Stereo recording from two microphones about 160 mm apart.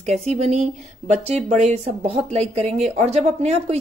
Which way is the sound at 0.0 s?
45° right (ahead or behind).